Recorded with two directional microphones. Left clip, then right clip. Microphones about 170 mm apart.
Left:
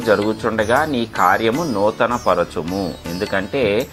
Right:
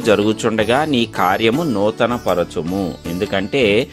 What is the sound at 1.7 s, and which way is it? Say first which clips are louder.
Speech: even; 40° right (ahead or behind).